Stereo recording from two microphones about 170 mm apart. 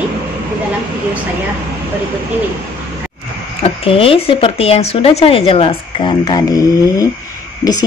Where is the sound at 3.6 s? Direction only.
35° left (ahead or behind).